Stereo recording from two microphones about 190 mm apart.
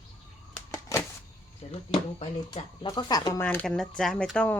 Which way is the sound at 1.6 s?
30° left (ahead or behind).